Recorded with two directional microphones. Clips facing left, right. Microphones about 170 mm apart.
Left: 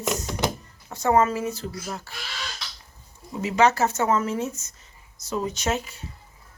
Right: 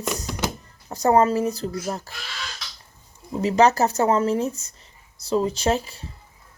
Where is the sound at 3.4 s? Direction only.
35° right (ahead or behind).